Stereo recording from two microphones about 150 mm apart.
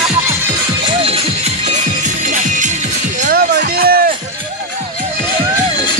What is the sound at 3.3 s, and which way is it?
Music, 90° right.